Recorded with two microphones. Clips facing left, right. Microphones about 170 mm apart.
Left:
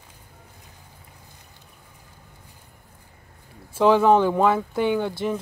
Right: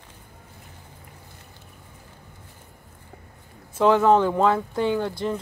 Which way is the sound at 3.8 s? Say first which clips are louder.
Left 1 dB; 15° left (ahead or behind).